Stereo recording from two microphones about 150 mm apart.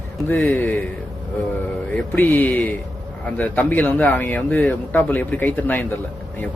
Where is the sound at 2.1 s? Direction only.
10° left (ahead or behind).